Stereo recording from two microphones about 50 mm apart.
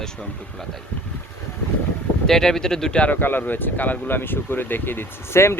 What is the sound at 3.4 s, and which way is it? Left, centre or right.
Speech, left.